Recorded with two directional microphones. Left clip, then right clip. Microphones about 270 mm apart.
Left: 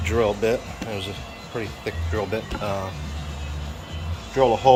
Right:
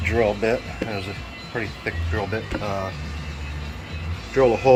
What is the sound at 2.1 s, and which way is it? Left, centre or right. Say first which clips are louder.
Speech: left 2 dB; centre.